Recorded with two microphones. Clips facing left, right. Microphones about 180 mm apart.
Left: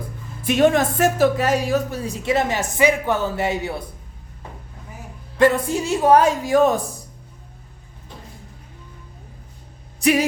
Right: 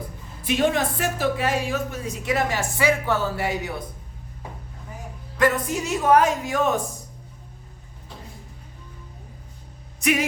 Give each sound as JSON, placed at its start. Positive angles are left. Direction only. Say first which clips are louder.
{"t": 0.4, "sound": "speech", "louder": "left 5 dB", "side_deg": 50}
{"t": 5.4, "sound": "speech", "louder": "left 5 dB", "side_deg": 30}
{"t": 10.0, "sound": "speech", "louder": "left 5 dB", "side_deg": 35}